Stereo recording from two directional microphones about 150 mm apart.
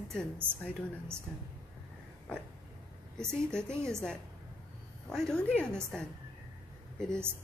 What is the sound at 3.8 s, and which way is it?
Speech, 20° right (ahead or behind).